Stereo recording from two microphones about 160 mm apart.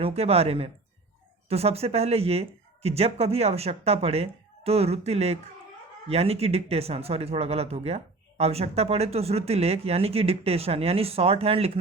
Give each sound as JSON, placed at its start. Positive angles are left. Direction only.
{"t": 0.0, "sound": "speech", "side_deg": -40}